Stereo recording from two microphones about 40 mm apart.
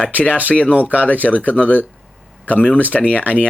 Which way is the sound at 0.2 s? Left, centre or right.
Left.